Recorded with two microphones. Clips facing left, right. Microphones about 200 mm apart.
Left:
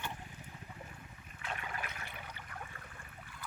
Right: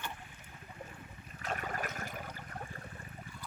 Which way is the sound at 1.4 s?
40° right (ahead or behind).